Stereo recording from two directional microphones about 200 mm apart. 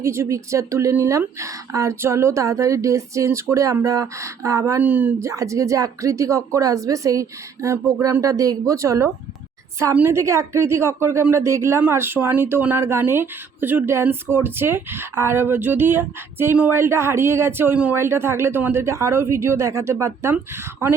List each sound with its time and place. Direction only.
0.0 s a woman's voice: 15° right (ahead or behind)